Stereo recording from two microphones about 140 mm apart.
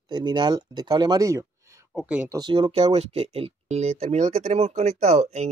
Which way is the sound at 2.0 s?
10° right (ahead or behind).